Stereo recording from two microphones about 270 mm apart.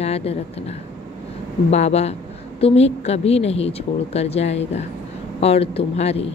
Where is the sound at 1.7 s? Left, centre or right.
Left.